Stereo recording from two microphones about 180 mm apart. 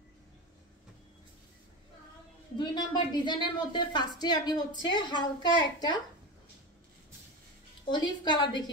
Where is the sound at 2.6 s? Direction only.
25° left (ahead or behind).